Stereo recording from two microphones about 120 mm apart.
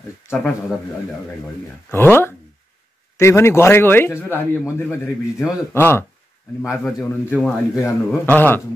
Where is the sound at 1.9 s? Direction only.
20° left (ahead or behind).